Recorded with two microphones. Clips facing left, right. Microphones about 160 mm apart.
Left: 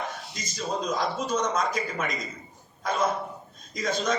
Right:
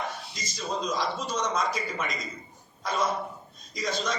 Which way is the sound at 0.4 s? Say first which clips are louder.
Left 2 dB; 50° left (ahead or behind).